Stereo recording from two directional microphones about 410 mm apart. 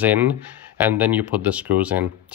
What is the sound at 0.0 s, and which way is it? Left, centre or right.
Speech, centre.